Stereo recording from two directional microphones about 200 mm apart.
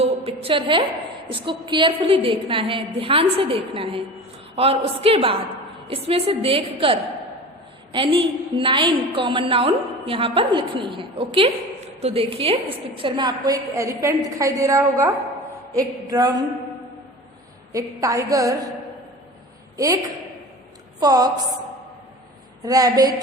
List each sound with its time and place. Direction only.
0.0 s a sound: 30° right (ahead or behind)
0.4 s a woman's voice: 25° right (ahead or behind)
17.7 s a woman's voice: 15° right (ahead or behind)
19.7 s a woman's voice: 15° right (ahead or behind)
21.0 s a woman's voice: 20° right (ahead or behind)
22.6 s a woman's voice: 15° right (ahead or behind)